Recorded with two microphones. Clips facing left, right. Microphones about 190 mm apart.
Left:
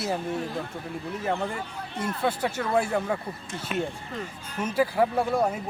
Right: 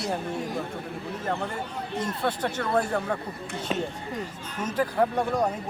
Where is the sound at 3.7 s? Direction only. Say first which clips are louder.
Even; 30° right (ahead or behind).